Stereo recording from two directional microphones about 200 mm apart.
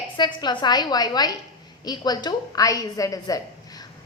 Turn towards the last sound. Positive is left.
turn(degrees=20)  # may be behind; listen again after turning